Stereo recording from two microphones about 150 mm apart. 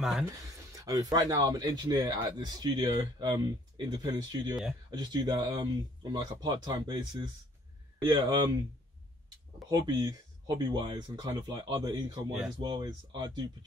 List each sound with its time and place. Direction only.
0.7 s speech: 25° right (ahead or behind)
9.7 s speech: 30° right (ahead or behind)
12.3 s speech: 5° right (ahead or behind)
12.5 s speech: 30° right (ahead or behind)